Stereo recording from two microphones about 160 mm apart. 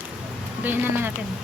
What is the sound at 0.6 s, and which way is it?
Speech, 15° right (ahead or behind).